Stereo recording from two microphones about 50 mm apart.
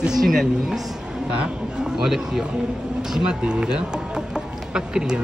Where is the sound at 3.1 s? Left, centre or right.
Centre.